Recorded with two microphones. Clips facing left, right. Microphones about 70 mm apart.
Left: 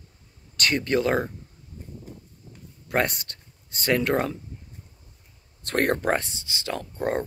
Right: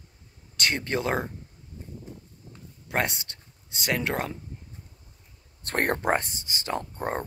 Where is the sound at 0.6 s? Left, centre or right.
Right.